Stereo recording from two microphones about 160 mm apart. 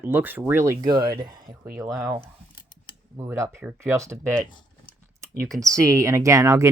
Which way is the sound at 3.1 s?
15° right (ahead or behind).